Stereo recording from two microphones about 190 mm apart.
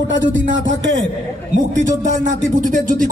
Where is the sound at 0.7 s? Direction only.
75° right (ahead or behind).